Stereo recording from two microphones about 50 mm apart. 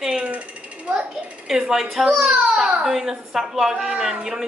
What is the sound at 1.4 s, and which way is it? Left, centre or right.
A woman's voice, centre.